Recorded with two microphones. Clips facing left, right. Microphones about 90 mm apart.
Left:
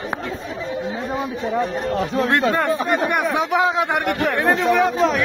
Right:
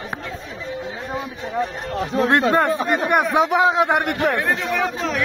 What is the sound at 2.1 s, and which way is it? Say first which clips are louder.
Speech: right 3 dB; 20° right (ahead or behind).